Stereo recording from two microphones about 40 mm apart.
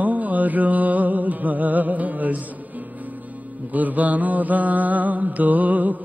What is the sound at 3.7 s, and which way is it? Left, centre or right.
Music, right.